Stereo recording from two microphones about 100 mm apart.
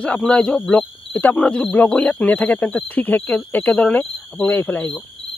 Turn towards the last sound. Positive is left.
turn(degrees=15)  # may be behind; listen again after turning